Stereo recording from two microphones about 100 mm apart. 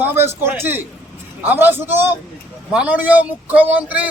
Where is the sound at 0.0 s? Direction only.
20° right (ahead or behind).